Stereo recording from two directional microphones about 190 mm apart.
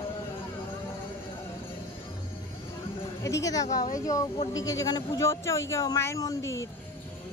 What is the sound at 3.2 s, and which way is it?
Speech, 15° left (ahead or behind).